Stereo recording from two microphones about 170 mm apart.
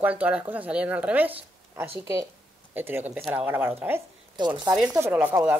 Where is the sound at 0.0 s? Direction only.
10° right (ahead or behind).